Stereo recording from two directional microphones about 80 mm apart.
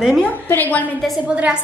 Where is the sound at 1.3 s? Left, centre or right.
Centre.